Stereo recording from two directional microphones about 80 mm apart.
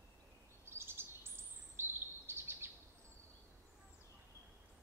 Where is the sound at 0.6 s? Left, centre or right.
Right.